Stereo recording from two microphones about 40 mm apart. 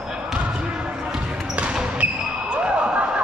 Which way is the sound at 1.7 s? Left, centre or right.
Right.